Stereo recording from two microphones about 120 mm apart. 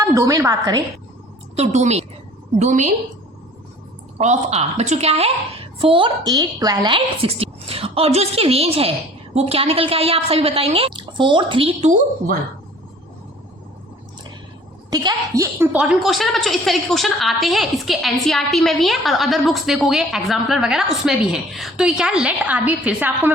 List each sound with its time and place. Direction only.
0.0 s a woman's voice: 30° right (ahead or behind)
1.5 s a woman's voice: 65° right (ahead or behind)
2.6 s a woman's voice: 90° right
4.2 s a woman's voice: 70° right (ahead or behind); by 11.7 s 45° right (ahead or behind)
14.8 s a woman's voice: 35° right (ahead or behind)
15.5 s a woman's voice: 15° right (ahead or behind)